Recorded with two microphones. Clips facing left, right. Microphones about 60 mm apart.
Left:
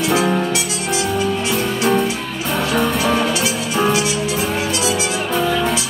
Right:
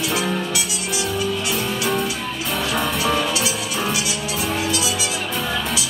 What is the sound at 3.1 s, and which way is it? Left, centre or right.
Music, left.